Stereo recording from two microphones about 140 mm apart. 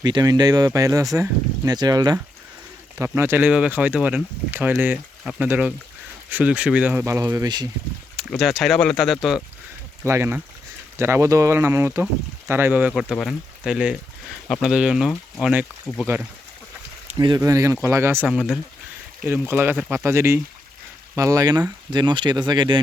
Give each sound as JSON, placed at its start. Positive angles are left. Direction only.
{"t": 0.0, "sound": "speech", "side_deg": -30}
{"t": 3.0, "sound": "speech", "side_deg": -15}
{"t": 7.0, "sound": "speech", "side_deg": -20}
{"t": 8.1, "sound": "speech", "side_deg": 0}
{"t": 10.1, "sound": "speech", "side_deg": -15}
{"t": 17.2, "sound": "speech", "side_deg": -30}
{"t": 18.3, "sound": "speech", "side_deg": 0}
{"t": 19.2, "sound": "speech", "side_deg": -15}